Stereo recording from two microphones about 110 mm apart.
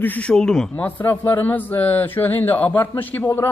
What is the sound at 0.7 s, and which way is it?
A man's voice, 20° left (ahead or behind).